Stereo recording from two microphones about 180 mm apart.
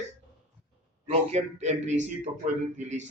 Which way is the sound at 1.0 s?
35° right (ahead or behind).